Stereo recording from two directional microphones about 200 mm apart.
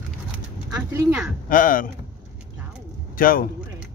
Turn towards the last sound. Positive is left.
turn(degrees=45)  # may be behind; listen again after turning